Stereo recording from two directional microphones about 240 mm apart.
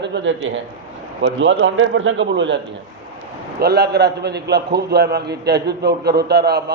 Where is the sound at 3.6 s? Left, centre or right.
Right.